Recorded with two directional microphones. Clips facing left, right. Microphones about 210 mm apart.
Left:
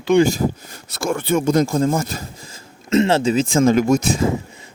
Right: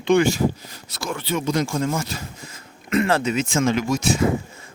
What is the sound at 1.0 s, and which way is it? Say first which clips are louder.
Speech: left 6 dB; 50° left (ahead or behind).